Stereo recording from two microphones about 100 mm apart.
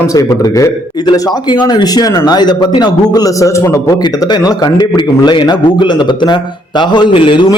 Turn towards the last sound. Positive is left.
turn(degrees=60)  # may be behind; listen again after turning